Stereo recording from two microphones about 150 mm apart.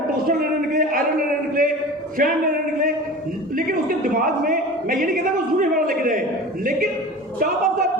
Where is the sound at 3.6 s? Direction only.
65° right (ahead or behind).